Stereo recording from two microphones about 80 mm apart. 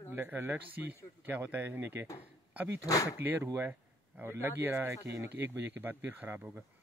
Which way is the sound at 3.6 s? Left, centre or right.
Right.